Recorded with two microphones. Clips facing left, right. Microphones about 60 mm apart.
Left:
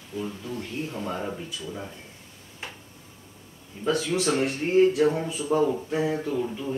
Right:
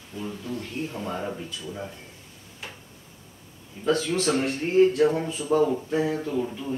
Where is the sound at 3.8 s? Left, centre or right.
Centre.